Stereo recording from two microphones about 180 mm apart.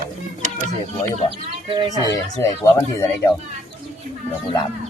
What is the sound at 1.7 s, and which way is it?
Speech, 20° right (ahead or behind).